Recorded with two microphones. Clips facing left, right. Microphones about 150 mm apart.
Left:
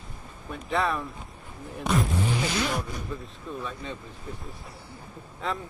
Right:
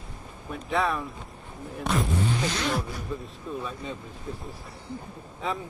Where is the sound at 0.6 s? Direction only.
Centre (ahead or behind).